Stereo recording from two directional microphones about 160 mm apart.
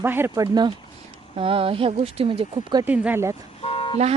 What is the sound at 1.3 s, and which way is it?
Speech, 35° right (ahead or behind).